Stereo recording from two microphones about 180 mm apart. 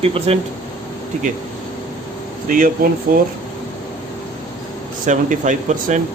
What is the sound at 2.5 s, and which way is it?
Speech, 45° right (ahead or behind).